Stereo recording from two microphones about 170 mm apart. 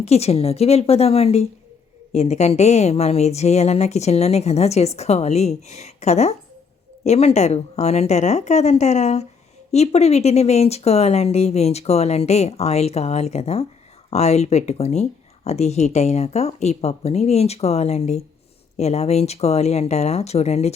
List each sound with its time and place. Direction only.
0.0 s a woman's voice: 40° left (ahead or behind)